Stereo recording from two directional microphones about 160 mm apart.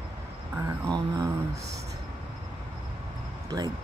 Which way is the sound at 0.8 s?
20° right (ahead or behind).